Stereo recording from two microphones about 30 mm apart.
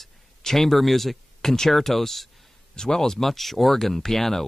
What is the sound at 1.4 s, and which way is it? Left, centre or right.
Speech, centre.